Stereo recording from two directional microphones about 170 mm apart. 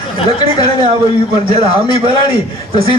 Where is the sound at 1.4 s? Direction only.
35° right (ahead or behind).